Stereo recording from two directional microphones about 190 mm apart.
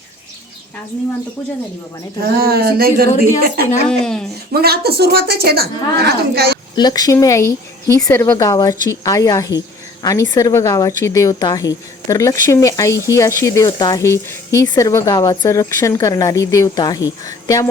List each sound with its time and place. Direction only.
2.2 s speech: 55° right (ahead or behind)
3.8 s speech: 5° left (ahead or behind)
4.5 s a woman's voice: 55° right (ahead or behind)
6.7 s a woman's voice: 20° left (ahead or behind)